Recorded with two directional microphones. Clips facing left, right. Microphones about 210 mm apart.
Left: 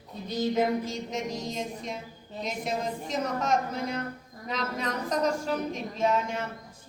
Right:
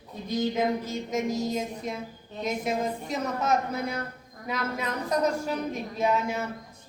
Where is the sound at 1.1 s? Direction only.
5° right (ahead or behind).